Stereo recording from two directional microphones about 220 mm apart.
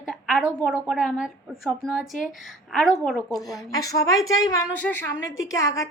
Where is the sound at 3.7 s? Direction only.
15° left (ahead or behind).